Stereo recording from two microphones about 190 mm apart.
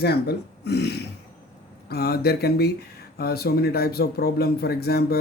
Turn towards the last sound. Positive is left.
turn(degrees=55)  # may be behind; listen again after turning